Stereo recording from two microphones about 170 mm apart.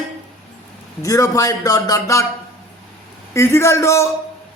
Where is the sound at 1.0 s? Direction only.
20° left (ahead or behind).